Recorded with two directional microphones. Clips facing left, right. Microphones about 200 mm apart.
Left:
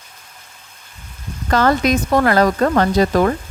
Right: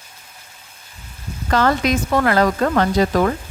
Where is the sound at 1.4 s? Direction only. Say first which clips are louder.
Left 2 dB; 45° left (ahead or behind).